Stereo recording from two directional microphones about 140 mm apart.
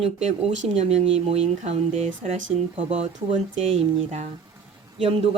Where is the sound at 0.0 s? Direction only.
45° right (ahead or behind).